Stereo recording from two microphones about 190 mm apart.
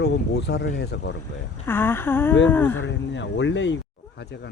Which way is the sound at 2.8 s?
70° left (ahead or behind).